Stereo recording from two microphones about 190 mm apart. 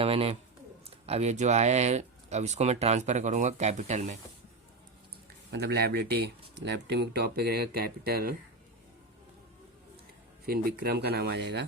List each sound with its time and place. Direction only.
0.0 s speech: 30° right (ahead or behind)
5.5 s speech: 60° right (ahead or behind)
10.4 s speech: 55° right (ahead or behind)